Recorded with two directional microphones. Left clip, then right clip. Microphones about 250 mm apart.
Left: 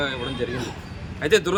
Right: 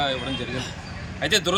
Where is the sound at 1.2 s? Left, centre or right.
Centre.